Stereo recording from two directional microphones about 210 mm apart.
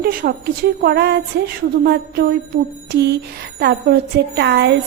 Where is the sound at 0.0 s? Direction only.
45° right (ahead or behind).